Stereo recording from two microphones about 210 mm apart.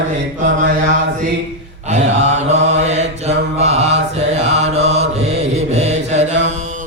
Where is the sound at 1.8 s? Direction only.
30° right (ahead or behind).